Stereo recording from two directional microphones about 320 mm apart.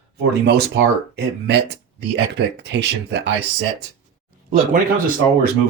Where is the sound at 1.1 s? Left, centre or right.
Right.